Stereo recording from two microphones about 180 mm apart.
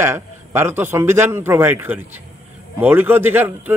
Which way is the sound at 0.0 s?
15° right (ahead or behind).